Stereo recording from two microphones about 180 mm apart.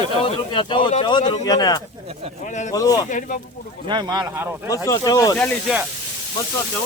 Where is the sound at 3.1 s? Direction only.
45° left (ahead or behind).